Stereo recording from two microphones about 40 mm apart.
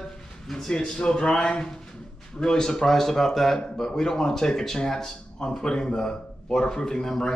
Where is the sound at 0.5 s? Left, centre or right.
Centre.